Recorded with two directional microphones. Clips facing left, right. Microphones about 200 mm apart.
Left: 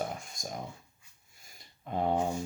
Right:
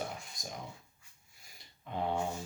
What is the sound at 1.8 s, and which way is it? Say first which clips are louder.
Speech: left 5 dB; 45° left (ahead or behind).